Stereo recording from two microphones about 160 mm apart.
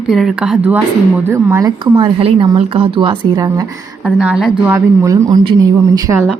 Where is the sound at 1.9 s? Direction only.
30° right (ahead or behind).